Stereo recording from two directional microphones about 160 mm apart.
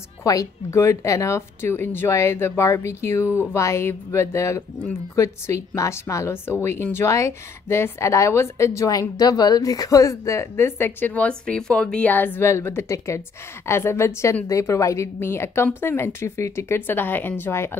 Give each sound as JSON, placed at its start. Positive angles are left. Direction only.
{"t": 0.2, "sound": "speech", "side_deg": 20}